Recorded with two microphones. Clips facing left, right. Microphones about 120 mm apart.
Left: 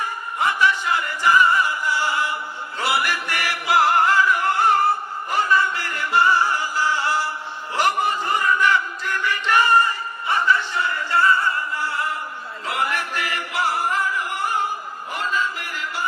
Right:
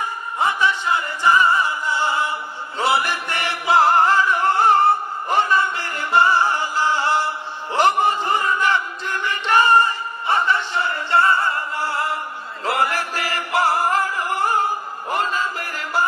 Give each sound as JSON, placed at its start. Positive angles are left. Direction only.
{"t": 0.4, "sound": "music", "side_deg": -20}
{"t": 12.6, "sound": "singing", "side_deg": -35}